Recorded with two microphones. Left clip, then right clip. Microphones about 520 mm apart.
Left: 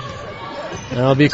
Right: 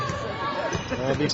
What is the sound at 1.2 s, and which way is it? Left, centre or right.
Speech, left.